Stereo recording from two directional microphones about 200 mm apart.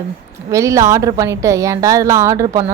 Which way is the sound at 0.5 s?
15° right (ahead or behind).